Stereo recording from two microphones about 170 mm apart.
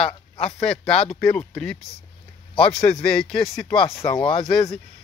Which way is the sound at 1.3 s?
5° left (ahead or behind).